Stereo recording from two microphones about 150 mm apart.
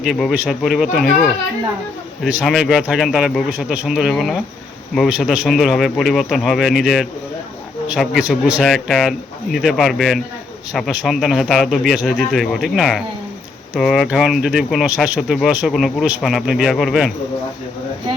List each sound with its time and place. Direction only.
0.0 s speech: centre (ahead or behind)